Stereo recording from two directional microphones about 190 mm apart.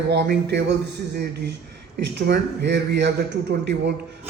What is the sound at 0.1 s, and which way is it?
Speech, 60° right (ahead or behind).